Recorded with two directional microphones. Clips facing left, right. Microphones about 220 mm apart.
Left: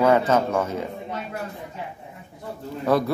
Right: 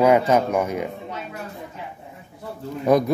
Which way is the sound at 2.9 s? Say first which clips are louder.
Right 3 dB; 15° right (ahead or behind).